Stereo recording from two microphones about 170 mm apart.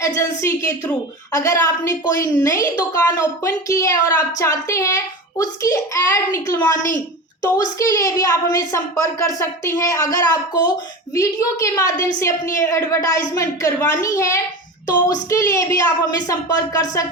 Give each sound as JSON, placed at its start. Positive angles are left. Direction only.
{"t": 0.2, "sound": "a woman's voice", "side_deg": 15}